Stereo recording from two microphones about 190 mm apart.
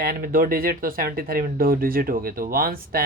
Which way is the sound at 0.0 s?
50° right (ahead or behind).